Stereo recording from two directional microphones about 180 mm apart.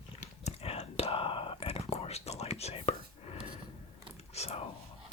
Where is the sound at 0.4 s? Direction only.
35° left (ahead or behind).